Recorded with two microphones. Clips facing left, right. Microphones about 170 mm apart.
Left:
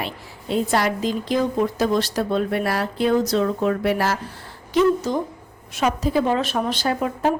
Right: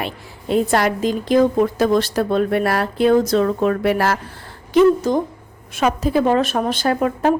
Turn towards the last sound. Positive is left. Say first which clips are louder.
# right 4 dB
turn(degrees=-55)  # may be behind; listen again after turning